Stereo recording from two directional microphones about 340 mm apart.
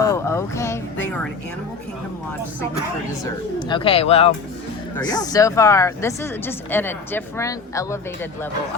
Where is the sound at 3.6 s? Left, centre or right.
Centre.